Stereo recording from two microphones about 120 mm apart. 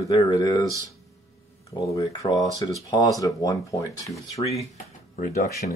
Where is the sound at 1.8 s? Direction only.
30° left (ahead or behind).